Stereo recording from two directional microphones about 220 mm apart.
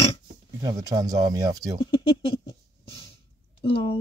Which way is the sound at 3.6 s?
25° left (ahead or behind).